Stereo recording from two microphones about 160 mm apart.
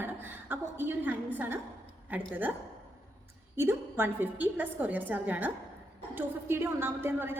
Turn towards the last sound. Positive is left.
turn(degrees=-15)  # may be behind; listen again after turning